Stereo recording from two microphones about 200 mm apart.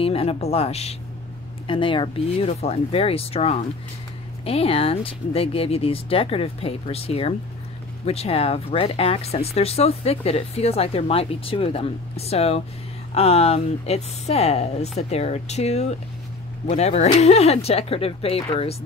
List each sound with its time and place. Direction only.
0.0 s speech: 30° left (ahead or behind)